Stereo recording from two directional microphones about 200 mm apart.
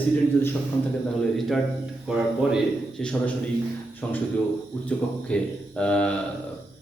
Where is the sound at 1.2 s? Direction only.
Centre (ahead or behind).